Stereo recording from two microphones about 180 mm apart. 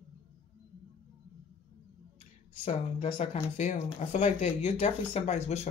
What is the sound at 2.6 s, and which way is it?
Speech, 35° left (ahead or behind).